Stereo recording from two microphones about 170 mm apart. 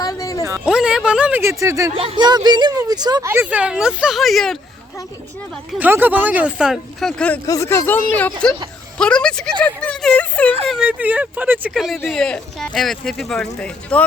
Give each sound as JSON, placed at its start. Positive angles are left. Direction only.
{"t": 0.0, "sound": "music", "side_deg": 20}
{"t": 0.6, "sound": "speech", "side_deg": -5}
{"t": 2.0, "sound": "speech", "side_deg": -30}
{"t": 5.8, "sound": "speech", "side_deg": -10}
{"t": 7.4, "sound": "speech", "side_deg": 20}
{"t": 9.0, "sound": "a sound", "side_deg": 5}
{"t": 10.7, "sound": "speech", "side_deg": -5}